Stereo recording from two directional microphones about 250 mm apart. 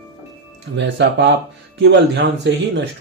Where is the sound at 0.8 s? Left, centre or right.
Right.